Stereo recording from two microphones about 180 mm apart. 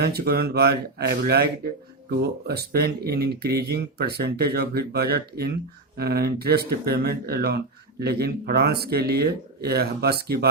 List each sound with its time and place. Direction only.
0.0 s speech: 60° right (ahead or behind)